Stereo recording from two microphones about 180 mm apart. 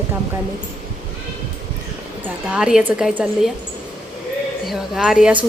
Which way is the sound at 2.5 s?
5° right (ahead or behind).